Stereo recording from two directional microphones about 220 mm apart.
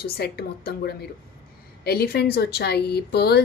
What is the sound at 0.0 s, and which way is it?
A woman's voice, 45° left (ahead or behind).